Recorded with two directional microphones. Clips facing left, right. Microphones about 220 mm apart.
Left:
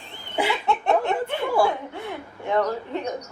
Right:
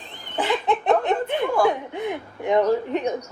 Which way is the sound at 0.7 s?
15° right (ahead or behind).